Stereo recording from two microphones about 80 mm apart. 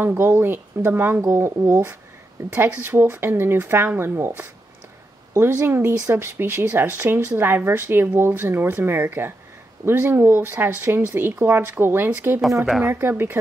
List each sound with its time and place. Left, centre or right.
0.0 s speech: right